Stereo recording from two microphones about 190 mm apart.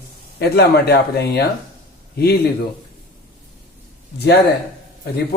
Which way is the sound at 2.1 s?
55° left (ahead or behind).